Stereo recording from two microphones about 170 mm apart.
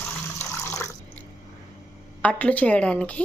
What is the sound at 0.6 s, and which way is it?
Water, 15° left (ahead or behind).